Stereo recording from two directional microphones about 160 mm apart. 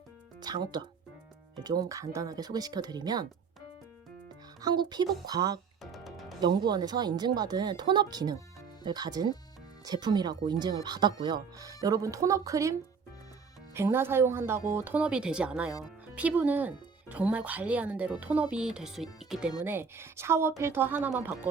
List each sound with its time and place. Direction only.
0.4 s speech: 25° right (ahead or behind)
4.6 s speech: 25° right (ahead or behind)
5.8 s music: centre (ahead or behind)
6.4 s speech: 25° right (ahead or behind)
13.7 s speech: 15° right (ahead or behind)
19.6 s speech: 15° right (ahead or behind)